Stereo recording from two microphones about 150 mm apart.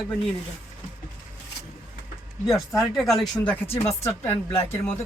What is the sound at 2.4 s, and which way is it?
Speech, centre (ahead or behind).